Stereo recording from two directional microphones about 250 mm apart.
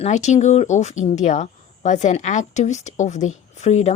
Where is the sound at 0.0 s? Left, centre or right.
Left.